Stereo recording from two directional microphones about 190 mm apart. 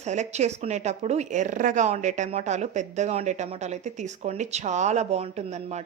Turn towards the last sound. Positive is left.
turn(degrees=-35)  # may be behind; listen again after turning